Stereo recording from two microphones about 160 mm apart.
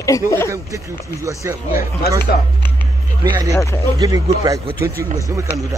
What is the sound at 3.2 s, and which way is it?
Speech, 20° right (ahead or behind).